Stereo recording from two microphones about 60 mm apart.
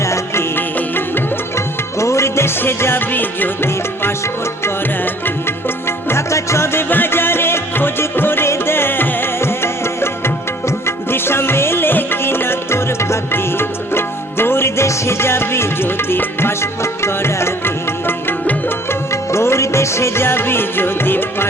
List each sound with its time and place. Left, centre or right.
0.0 s music: left
0.5 s music: left
1.5 s music: left
6.8 s music: left
19.1 s music: left